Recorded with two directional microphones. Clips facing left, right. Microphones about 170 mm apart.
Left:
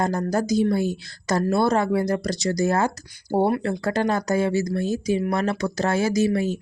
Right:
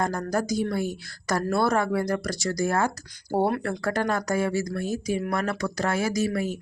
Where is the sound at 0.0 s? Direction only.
25° left (ahead or behind).